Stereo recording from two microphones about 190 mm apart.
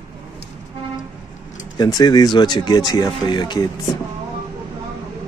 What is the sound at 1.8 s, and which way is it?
Speech, 20° left (ahead or behind).